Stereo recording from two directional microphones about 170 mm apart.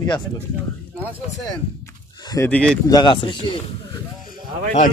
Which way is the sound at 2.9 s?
25° left (ahead or behind).